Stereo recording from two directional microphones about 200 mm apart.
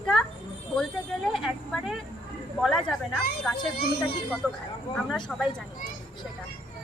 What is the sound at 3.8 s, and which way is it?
Speech, 50° left (ahead or behind).